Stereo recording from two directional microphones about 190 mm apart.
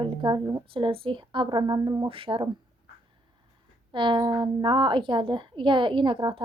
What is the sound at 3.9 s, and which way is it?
A woman's voice, 25° right (ahead or behind).